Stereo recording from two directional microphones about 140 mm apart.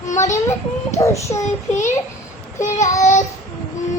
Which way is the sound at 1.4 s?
60° left (ahead or behind).